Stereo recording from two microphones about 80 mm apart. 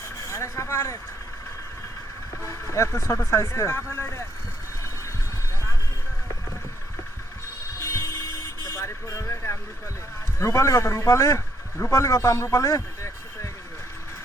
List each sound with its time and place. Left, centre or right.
0.3 s speech: left
2.4 s speech: left
7.8 s a sound: left
8.7 s speech: left